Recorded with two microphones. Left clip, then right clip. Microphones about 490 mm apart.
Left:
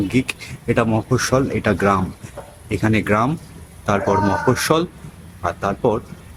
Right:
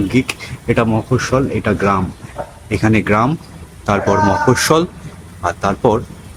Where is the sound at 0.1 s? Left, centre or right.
Left.